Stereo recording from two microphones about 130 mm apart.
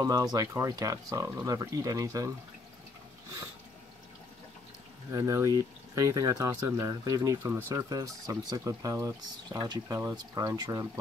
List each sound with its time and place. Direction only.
0.0 s speech: 30° right (ahead or behind)
5.1 s speech: 20° right (ahead or behind)